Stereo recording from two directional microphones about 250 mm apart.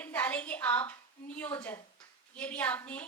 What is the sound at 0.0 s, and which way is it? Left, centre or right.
A woman's voice, centre.